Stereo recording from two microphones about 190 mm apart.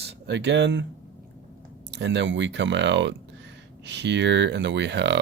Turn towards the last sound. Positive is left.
turn(degrees=-65)  # may be behind; listen again after turning